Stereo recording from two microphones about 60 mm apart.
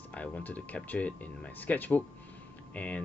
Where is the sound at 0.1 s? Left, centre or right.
Left.